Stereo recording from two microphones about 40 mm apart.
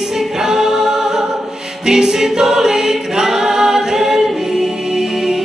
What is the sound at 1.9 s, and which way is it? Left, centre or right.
A capella, centre.